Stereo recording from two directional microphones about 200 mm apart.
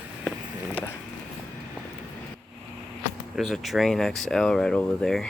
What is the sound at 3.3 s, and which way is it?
Speech, centre (ahead or behind).